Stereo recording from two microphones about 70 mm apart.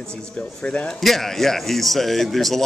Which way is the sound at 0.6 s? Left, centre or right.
Centre.